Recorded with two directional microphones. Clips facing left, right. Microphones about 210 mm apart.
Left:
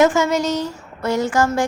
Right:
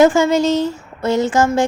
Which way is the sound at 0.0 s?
30° right (ahead or behind).